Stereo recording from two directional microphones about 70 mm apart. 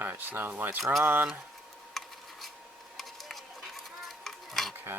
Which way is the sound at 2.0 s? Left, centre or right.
Centre.